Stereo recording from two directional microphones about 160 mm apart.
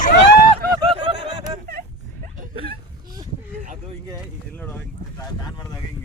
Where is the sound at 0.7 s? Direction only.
25° right (ahead or behind).